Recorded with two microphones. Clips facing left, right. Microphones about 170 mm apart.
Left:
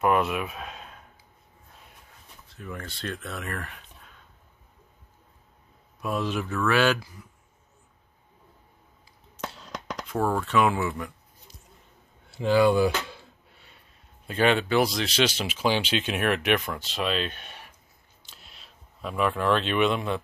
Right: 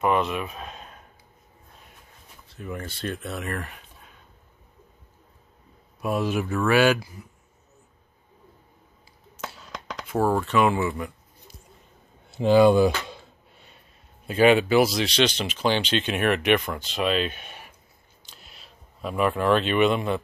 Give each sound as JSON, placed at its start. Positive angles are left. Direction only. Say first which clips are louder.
{"t": 0.0, "sound": "speech", "louder": "even", "side_deg": 5}
{"t": 2.6, "sound": "speech", "louder": "right 4 dB", "side_deg": -10}
{"t": 5.9, "sound": "speech", "louder": "right 3 dB", "side_deg": -10}
{"t": 9.4, "sound": "a sound", "louder": "left 1 dB", "side_deg": -5}
{"t": 10.1, "sound": "speech", "louder": "right 2 dB", "side_deg": -5}
{"t": 12.3, "sound": "speech", "louder": "right 4 dB", "side_deg": -20}
{"t": 14.2, "sound": "speech", "louder": "right 5 dB", "side_deg": -5}
{"t": 18.2, "sound": "a sound", "louder": "right 2 dB", "side_deg": 0}